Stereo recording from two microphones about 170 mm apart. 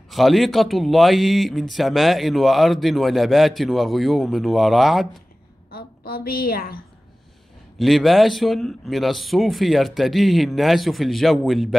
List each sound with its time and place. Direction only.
0.1 s a man's voice: centre (ahead or behind)
5.7 s a woman's voice: 65° left (ahead or behind)
7.8 s a man's voice: centre (ahead or behind)